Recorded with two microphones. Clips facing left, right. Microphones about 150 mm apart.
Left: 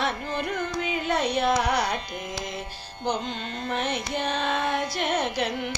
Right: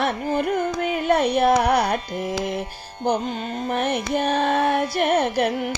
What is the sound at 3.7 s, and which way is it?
Music, 55° right (ahead or behind).